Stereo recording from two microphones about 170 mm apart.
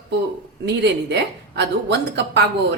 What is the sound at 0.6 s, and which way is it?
A woman's voice, 80° right.